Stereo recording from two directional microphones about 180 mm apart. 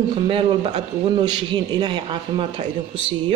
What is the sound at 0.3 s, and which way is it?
Speech, 30° right (ahead or behind).